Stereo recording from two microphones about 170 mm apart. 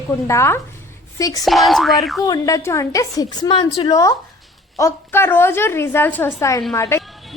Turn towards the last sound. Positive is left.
turn(degrees=15)  # may be behind; listen again after turning